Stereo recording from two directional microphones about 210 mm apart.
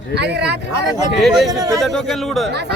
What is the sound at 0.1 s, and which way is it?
Speech, 55° right (ahead or behind).